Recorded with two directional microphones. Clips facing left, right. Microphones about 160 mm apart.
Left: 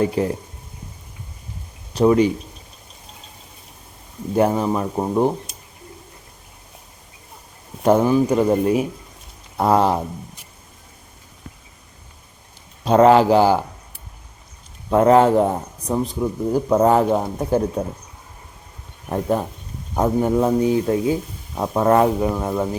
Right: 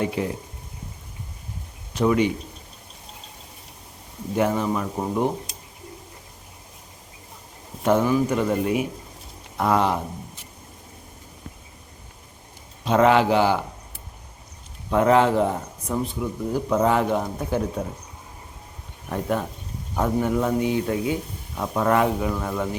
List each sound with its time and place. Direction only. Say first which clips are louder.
0.2 s speech: left 5 dB; 40° left (ahead or behind)
1.9 s speech: left 5 dB; 35° left (ahead or behind)
4.4 s speech: left 4 dB; 35° left (ahead or behind)
7.9 s speech: left 4 dB; 35° left (ahead or behind)
12.8 s speech: left 5 dB; 40° left (ahead or behind)
14.8 s speech: left 4 dB; 40° left (ahead or behind)
19.0 s speech: left 4 dB; 35° left (ahead or behind)